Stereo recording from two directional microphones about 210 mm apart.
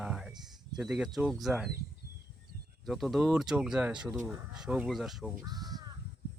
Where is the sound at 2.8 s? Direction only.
Centre (ahead or behind).